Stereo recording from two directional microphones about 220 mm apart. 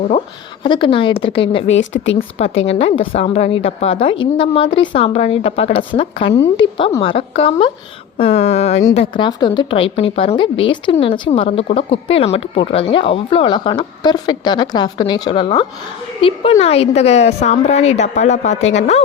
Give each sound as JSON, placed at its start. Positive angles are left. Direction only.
{"t": 0.6, "sound": "speech", "side_deg": 20}
{"t": 2.0, "sound": "speech", "side_deg": 40}
{"t": 2.6, "sound": "speech", "side_deg": 25}